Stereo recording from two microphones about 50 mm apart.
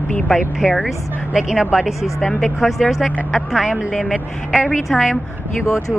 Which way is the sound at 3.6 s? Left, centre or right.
Centre.